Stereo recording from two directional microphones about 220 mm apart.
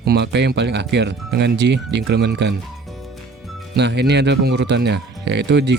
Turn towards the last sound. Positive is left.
turn(degrees=-50)  # may be behind; listen again after turning